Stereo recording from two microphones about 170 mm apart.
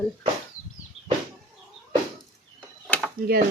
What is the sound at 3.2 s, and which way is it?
Speech, 65° right (ahead or behind).